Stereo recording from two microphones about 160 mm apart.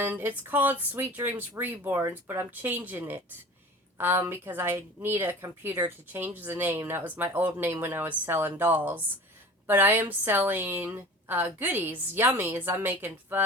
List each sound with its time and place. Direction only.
0.0 s a woman's voice: 15° right (ahead or behind)